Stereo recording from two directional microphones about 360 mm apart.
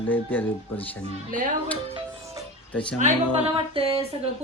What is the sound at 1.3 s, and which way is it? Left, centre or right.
Speech, right.